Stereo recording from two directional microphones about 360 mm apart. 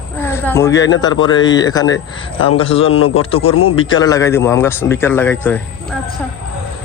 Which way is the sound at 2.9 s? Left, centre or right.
Left.